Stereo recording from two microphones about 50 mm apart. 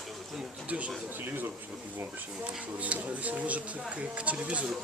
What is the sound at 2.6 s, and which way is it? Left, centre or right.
Speech, right.